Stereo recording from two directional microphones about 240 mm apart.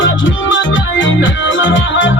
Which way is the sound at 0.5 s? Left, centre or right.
Left.